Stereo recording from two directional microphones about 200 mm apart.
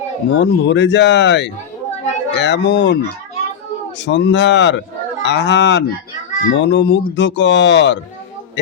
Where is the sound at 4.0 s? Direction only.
65° left (ahead or behind).